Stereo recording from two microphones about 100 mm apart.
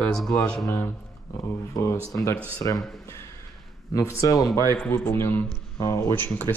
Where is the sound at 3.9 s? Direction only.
35° left (ahead or behind).